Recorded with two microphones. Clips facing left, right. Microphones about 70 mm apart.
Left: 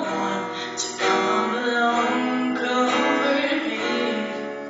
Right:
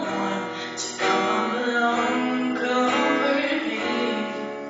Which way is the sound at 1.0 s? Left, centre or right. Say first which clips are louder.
Left 1 dB; centre.